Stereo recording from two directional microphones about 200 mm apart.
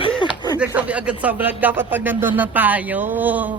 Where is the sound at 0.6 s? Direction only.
5° right (ahead or behind).